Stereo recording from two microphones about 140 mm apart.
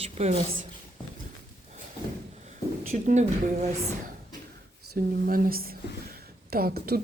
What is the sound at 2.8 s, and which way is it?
Speech, 55° right (ahead or behind).